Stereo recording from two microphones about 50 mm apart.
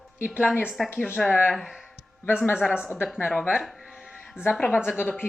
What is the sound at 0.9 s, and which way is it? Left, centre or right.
Speech, left.